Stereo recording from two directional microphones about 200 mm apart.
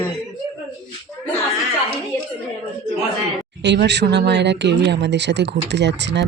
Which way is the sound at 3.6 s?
60° right (ahead or behind).